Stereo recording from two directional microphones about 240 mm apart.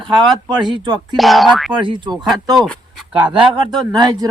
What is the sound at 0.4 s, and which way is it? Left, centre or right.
Speech, centre.